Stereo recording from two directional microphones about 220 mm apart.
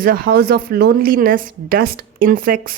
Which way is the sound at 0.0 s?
40° right (ahead or behind).